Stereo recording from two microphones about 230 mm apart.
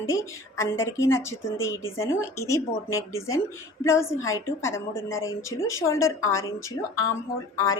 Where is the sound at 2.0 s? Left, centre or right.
Centre.